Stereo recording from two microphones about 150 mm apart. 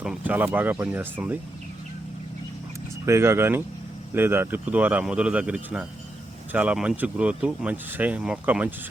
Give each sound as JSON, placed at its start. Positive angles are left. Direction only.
{"t": 0.0, "sound": "speech", "side_deg": -10}
{"t": 3.1, "sound": "speech", "side_deg": -15}